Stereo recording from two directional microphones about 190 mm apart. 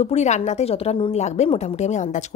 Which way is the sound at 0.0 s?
35° left (ahead or behind).